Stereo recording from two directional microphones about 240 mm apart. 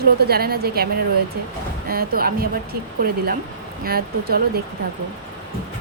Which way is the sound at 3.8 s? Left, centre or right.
Right.